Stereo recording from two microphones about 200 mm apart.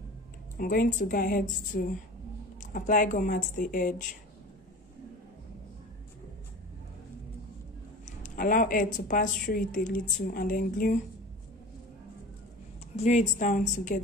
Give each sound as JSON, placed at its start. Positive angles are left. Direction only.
{"t": 0.6, "sound": "a woman's voice", "side_deg": 45}
{"t": 8.0, "sound": "a woman's voice", "side_deg": 40}
{"t": 12.9, "sound": "a woman's voice", "side_deg": 35}